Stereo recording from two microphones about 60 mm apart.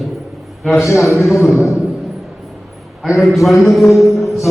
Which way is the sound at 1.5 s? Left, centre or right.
Left.